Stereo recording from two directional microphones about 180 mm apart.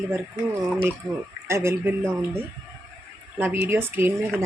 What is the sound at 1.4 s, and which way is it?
Speech, 15° right (ahead or behind).